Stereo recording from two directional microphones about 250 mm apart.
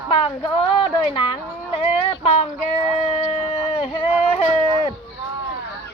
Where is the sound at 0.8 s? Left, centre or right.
Centre.